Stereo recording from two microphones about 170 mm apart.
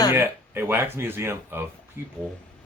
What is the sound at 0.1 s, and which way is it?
Speech, 15° right (ahead or behind).